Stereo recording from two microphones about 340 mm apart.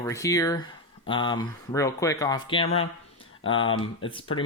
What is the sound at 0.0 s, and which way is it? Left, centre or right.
Speech, centre.